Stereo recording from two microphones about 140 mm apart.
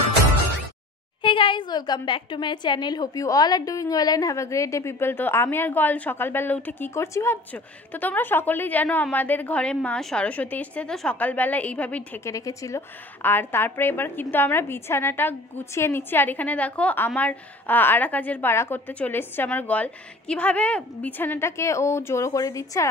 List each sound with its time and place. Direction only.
1.2 s a woman's voice: 35° left (ahead or behind); by 12.2 s 10° left (ahead or behind)
12.3 s a woman's voice: 25° left (ahead or behind)